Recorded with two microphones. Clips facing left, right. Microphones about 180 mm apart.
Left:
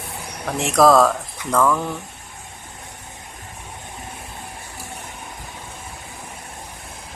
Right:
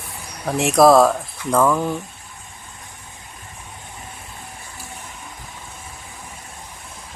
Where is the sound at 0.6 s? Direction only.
10° right (ahead or behind).